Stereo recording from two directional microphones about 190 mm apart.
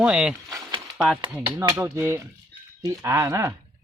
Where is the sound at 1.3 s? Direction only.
15° right (ahead or behind).